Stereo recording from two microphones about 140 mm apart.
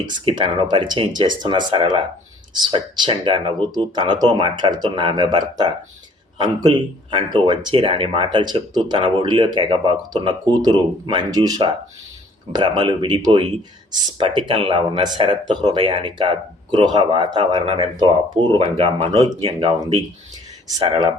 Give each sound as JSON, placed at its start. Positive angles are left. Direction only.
{"t": 0.0, "sound": "speech", "side_deg": -30}
{"t": 20.8, "sound": "speech", "side_deg": -40}